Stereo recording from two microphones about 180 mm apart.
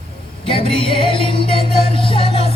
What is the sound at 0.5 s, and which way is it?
Music, 30° left (ahead or behind).